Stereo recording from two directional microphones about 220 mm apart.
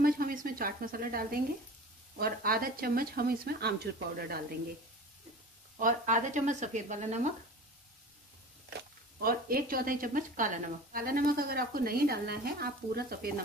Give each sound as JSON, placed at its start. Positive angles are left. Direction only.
{"t": 0.0, "sound": "a sound", "side_deg": -40}
{"t": 2.1, "sound": "speech", "side_deg": -40}
{"t": 5.8, "sound": "speech", "side_deg": -35}
{"t": 9.2, "sound": "speech", "side_deg": -40}